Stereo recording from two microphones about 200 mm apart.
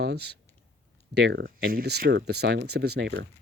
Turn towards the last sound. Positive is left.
turn(degrees=-65)  # may be behind; listen again after turning